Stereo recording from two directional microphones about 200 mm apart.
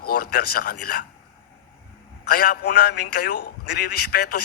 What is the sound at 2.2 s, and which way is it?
A man's voice, 50° left (ahead or behind).